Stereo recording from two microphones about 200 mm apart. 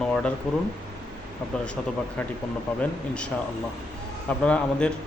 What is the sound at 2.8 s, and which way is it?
Speech, 5° left (ahead or behind).